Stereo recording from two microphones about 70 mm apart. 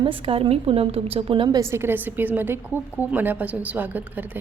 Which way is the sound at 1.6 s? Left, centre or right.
Right.